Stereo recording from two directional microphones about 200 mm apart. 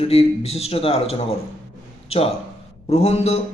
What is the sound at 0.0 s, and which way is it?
Speech, 30° left (ahead or behind).